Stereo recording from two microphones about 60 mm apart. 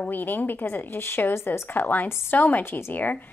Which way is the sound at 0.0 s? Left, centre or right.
Left.